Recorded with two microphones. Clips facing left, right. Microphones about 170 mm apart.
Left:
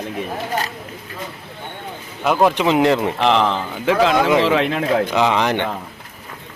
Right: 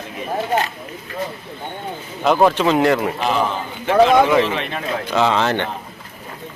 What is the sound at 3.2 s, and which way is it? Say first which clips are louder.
Speech: left 3 dB; 75° left (ahead or behind).